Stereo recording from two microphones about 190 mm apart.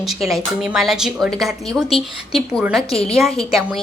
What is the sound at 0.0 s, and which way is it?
A woman's voice, centre (ahead or behind).